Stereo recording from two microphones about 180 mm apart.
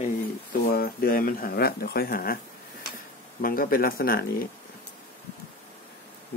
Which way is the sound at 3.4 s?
50° left (ahead or behind).